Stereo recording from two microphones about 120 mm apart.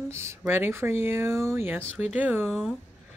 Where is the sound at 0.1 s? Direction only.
25° right (ahead or behind).